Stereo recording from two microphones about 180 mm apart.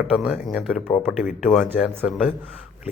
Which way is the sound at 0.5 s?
Centre (ahead or behind).